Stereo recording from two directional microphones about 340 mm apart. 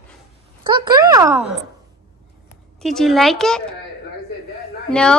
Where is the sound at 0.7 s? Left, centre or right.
Centre.